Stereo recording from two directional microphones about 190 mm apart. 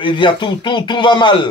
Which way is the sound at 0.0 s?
25° left (ahead or behind).